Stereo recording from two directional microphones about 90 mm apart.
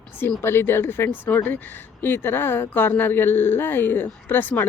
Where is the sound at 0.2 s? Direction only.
25° left (ahead or behind).